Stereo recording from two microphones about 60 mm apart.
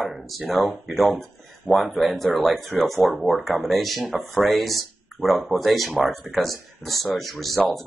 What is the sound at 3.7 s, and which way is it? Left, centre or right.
Speech, centre.